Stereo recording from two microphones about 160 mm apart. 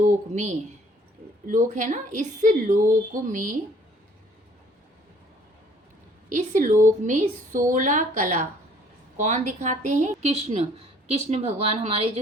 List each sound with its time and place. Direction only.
0.0 s a woman's voice: 45° right (ahead or behind)
2.9 s a sound: 55° right (ahead or behind)
6.2 s a woman's voice: 55° right (ahead or behind); by 12.2 s 40° right (ahead or behind)